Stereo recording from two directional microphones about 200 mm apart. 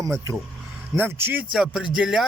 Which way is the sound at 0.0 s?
15° right (ahead or behind).